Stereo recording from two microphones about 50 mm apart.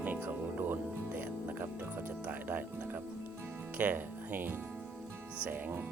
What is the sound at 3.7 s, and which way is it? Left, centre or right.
Speech, right.